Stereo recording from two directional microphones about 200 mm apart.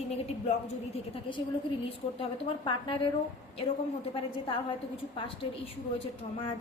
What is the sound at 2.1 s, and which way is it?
Speech, 25° left (ahead or behind).